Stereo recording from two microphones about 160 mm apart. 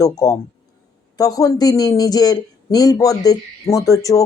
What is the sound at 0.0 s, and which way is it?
A woman's voice, 20° left (ahead or behind).